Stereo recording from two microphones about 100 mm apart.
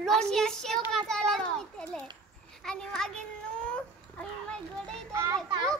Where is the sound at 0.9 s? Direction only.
5° left (ahead or behind).